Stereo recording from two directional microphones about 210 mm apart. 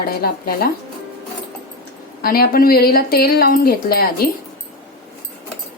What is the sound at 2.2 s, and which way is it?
Speech, 45° left (ahead or behind).